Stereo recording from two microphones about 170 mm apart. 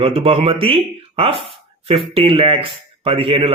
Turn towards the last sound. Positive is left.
turn(degrees=-35)  # may be behind; listen again after turning